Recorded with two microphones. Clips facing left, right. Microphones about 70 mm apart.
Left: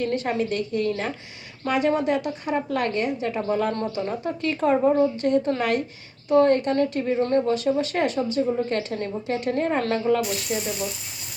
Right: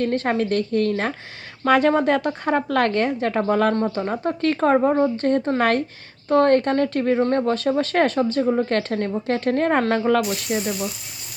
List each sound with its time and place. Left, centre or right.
0.0 s a woman's voice: right
3.8 s speech: right
6.8 s a woman's voice: right
7.2 s a woman's voice: right